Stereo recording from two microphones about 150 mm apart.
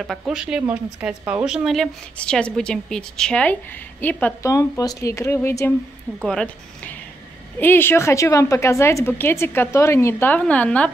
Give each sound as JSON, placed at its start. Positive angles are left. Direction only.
{"t": 0.0, "sound": "a woman's voice", "side_deg": -5}
{"t": 4.5, "sound": "speech", "side_deg": 20}
{"t": 6.1, "sound": "a woman's voice", "side_deg": 5}